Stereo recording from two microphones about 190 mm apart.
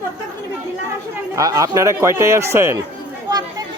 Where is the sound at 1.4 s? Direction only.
20° right (ahead or behind).